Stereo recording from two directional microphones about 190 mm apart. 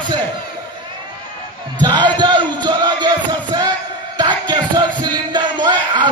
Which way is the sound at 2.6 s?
25° right (ahead or behind).